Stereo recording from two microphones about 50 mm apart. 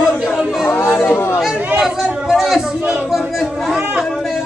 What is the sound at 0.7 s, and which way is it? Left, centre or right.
Chatter, left.